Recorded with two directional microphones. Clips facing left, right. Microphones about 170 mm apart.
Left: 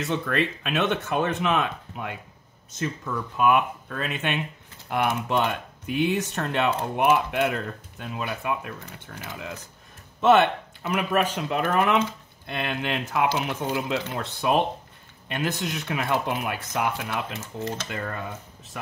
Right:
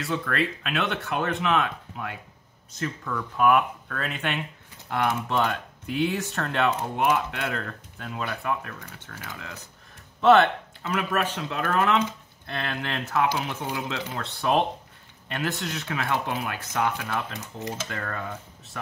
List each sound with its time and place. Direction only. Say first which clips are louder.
0.0 s speech: left 2 dB; 20° left (ahead or behind)
17.4 s speech: left 3 dB; 15° right (ahead or behind)
17.8 s speech: left 1 dB; 15° left (ahead or behind)